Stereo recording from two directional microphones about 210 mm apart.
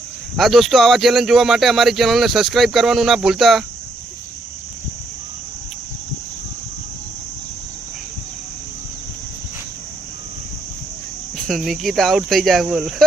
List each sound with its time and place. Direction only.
0.3 s speech: centre (ahead or behind)
11.3 s speech: centre (ahead or behind)